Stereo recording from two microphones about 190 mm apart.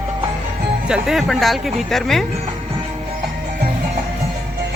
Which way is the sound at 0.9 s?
Centre (ahead or behind).